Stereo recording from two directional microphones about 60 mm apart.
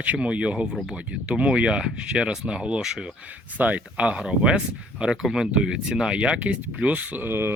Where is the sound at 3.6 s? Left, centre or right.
Right.